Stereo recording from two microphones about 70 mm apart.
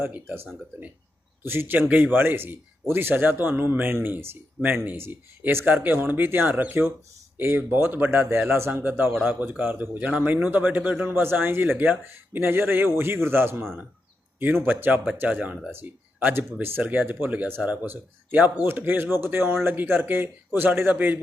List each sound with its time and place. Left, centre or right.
0.1 s speech: right
11.0 s speech: right